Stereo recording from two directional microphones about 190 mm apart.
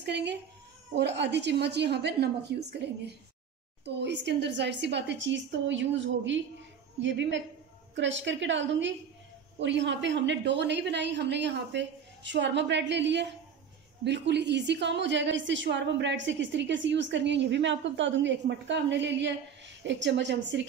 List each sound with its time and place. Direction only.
0.0 s a woman's voice: 65° right (ahead or behind)
3.8 s a woman's voice: 65° right (ahead or behind)